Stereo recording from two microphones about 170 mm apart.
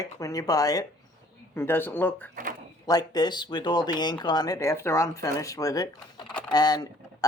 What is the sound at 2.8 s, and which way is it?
Speech, 25° left (ahead or behind).